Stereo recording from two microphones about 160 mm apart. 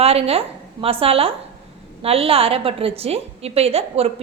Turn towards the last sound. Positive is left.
turn(degrees=-40)  # may be behind; listen again after turning